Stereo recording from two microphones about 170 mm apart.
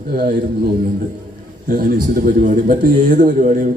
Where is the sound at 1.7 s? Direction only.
60° right (ahead or behind).